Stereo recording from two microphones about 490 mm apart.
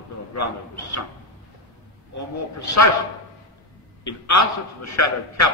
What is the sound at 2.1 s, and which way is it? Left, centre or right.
Speech, left.